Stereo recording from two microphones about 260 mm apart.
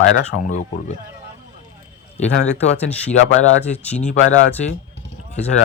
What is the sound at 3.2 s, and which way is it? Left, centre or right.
Speech, left.